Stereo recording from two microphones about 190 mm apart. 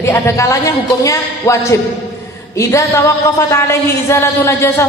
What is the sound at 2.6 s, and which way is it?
Speech, 15° left (ahead or behind).